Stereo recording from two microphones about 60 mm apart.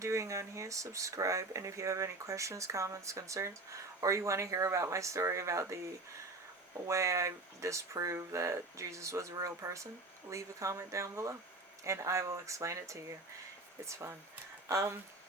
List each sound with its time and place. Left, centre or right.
0.0 s speech: right
6.8 s speech: right
13.8 s speech: right